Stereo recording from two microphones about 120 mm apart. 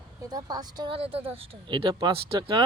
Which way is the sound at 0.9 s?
55° right (ahead or behind).